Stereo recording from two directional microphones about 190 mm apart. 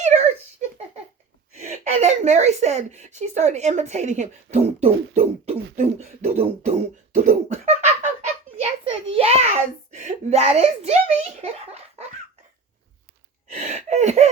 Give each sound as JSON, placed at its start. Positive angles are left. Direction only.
{"t": 0.0, "sound": "giggle", "side_deg": -35}
{"t": 1.5, "sound": "speech", "side_deg": -35}
{"t": 5.7, "sound": "beatboxing", "side_deg": -40}
{"t": 8.8, "sound": "a sound", "side_deg": -30}
{"t": 13.7, "sound": "gasp", "side_deg": -35}